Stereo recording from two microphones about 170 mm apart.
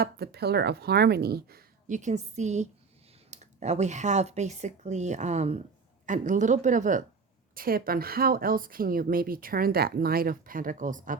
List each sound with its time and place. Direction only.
0.0 s speech: 70° right (ahead or behind)
1.9 s speech: 45° right (ahead or behind)
7.5 s speech: 60° right (ahead or behind)